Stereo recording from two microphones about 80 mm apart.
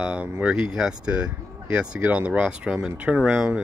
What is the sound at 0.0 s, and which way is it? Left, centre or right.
Speech, centre.